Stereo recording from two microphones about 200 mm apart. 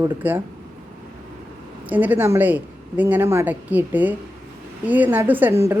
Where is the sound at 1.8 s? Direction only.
10° right (ahead or behind).